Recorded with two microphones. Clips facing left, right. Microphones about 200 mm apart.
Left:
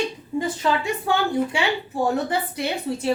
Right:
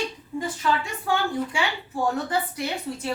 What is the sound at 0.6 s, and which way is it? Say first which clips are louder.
A woman's voice: left 1 dB; 30° left (ahead or behind).